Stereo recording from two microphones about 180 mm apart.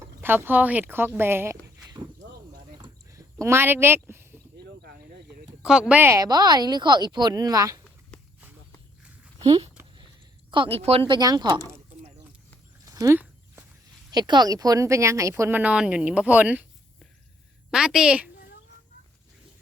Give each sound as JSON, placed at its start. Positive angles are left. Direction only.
{"t": 0.0, "sound": "speech", "side_deg": -10}
{"t": 2.5, "sound": "a sound", "side_deg": -20}
{"t": 4.5, "sound": "a sound", "side_deg": -65}
{"t": 5.6, "sound": "a woman's voice", "side_deg": -5}
{"t": 8.1, "sound": "walk", "side_deg": 5}
{"t": 9.4, "sound": "speech", "side_deg": -25}
{"t": 11.1, "sound": "a woman's voice", "side_deg": -20}
{"t": 12.8, "sound": "a sound", "side_deg": -20}
{"t": 14.1, "sound": "speech", "side_deg": -25}
{"t": 17.7, "sound": "a woman's voice", "side_deg": -5}